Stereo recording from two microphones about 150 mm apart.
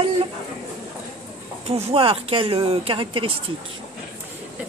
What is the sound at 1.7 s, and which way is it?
Speech, 40° right (ahead or behind).